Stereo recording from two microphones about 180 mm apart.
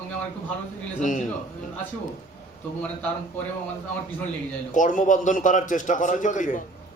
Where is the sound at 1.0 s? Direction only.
45° left (ahead or behind).